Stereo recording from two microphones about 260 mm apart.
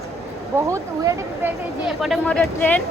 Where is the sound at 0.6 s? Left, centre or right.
Centre.